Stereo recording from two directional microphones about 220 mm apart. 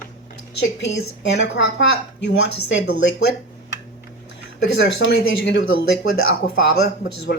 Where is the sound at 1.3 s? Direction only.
55° left (ahead or behind).